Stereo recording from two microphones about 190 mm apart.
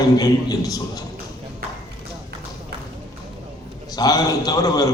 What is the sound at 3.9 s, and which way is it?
Speech, 20° left (ahead or behind).